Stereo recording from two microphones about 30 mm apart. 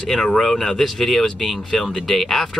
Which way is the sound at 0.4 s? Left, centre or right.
Centre.